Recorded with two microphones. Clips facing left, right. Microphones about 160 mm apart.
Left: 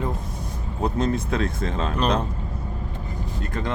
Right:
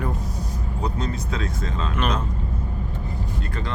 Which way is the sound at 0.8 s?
55° left (ahead or behind).